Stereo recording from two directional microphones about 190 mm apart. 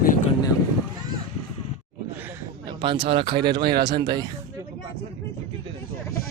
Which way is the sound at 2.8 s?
30° right (ahead or behind).